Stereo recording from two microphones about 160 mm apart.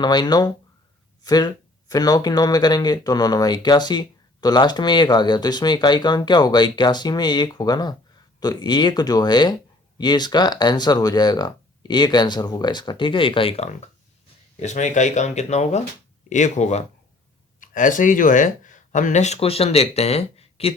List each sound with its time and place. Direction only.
0.0 s speech: 25° left (ahead or behind); by 16.8 s 45° left (ahead or behind)
17.6 s speech: 55° left (ahead or behind); by 20.7 s 40° left (ahead or behind)